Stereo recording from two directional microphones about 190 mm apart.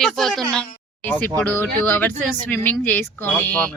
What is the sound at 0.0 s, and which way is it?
Speech, centre (ahead or behind).